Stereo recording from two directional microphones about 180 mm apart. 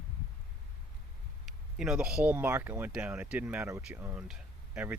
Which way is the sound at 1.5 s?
5° right (ahead or behind).